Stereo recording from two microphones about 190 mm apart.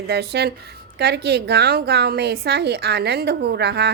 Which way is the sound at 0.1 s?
60° right (ahead or behind).